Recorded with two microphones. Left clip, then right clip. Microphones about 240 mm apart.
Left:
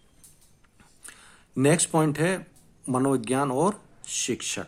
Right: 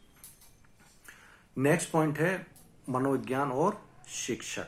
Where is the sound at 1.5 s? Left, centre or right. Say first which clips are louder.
Left 5 dB; left.